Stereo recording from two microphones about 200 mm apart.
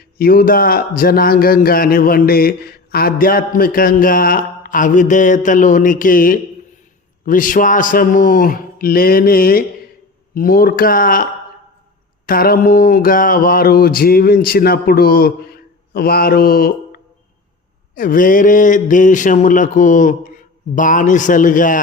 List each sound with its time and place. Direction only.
0.0 s speech: 50° left (ahead or behind)